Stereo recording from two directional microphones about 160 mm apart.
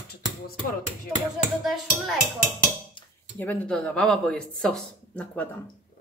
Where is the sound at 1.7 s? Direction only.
Centre (ahead or behind).